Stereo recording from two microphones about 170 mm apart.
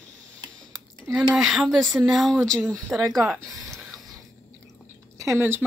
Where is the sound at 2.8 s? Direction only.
20° right (ahead or behind).